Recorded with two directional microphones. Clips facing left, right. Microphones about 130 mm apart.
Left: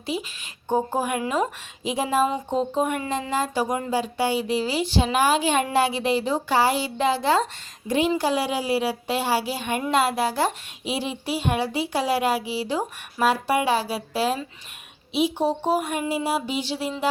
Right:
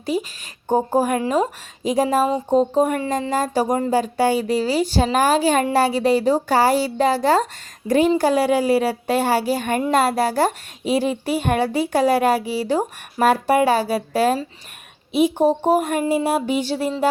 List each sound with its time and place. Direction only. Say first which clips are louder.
0.0 s a woman's voice: right 6 dB; 45° right (ahead or behind)